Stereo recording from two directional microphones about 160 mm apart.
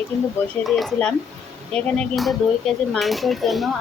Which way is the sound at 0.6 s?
Centre (ahead or behind).